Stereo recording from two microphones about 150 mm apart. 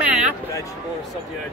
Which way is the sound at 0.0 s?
5° right (ahead or behind).